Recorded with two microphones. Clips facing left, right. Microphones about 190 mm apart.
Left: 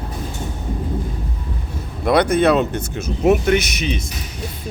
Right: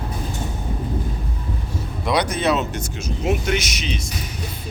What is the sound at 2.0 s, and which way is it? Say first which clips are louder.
Speech: left 6 dB; 55° left (ahead or behind).